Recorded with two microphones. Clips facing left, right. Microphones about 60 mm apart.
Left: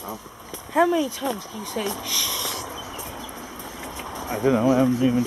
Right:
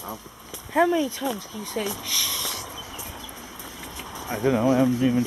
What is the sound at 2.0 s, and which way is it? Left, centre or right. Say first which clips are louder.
Speech: left 2 dB; left.